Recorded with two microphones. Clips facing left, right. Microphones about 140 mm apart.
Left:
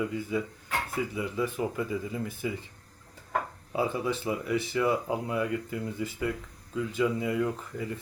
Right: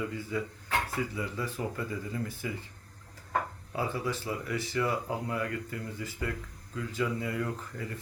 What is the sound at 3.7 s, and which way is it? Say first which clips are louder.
Speech: left 4 dB; 20° left (ahead or behind).